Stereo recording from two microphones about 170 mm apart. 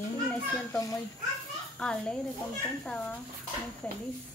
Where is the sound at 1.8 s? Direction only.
5° left (ahead or behind).